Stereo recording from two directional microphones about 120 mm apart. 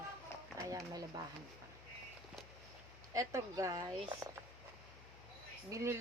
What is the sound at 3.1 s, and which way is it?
Speech, 25° right (ahead or behind).